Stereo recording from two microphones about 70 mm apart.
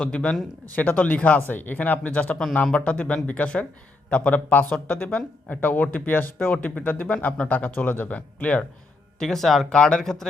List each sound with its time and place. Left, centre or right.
0.0 s speech: centre
9.1 s speech: centre
9.6 s speech: centre